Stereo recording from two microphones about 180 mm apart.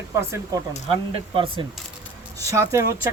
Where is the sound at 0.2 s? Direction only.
15° right (ahead or behind).